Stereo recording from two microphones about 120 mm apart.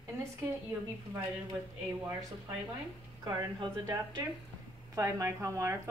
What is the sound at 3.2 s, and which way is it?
Speech, 35° right (ahead or behind).